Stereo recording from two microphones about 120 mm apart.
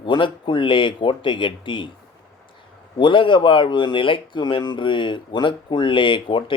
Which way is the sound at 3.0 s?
45° left (ahead or behind).